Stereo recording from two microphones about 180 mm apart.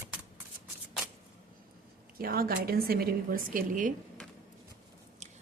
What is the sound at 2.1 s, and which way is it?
Speech, 55° right (ahead or behind).